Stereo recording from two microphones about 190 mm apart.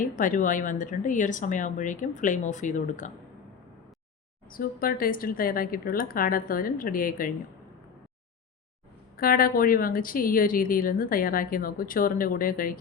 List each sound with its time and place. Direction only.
0.0 s a woman's voice: 45° left (ahead or behind)
4.4 s a woman's voice: 50° left (ahead or behind)
9.1 s a woman's voice: 50° left (ahead or behind)